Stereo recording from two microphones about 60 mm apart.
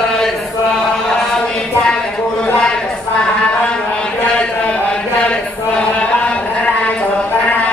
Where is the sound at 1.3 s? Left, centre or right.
Centre.